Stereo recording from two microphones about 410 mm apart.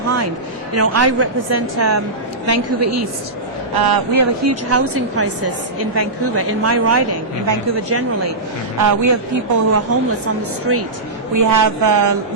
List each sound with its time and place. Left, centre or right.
0.7 s speech: right
3.8 s speech: right
8.8 s speech: right
11.3 s speech: right